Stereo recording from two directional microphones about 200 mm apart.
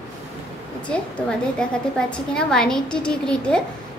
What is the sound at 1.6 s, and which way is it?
A woman's voice, 5° left (ahead or behind).